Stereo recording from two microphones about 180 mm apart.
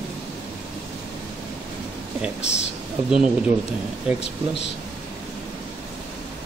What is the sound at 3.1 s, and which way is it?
Speech, 5° right (ahead or behind).